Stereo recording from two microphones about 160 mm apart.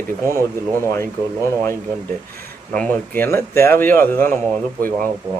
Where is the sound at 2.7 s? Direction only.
10° left (ahead or behind).